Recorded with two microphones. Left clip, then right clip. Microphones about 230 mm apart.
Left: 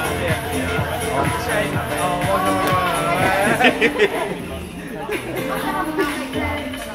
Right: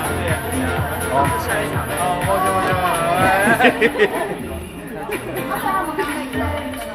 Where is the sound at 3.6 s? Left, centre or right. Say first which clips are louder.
Right 1 dB; right.